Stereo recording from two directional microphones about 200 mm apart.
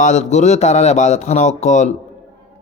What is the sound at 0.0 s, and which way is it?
Speech, 35° left (ahead or behind).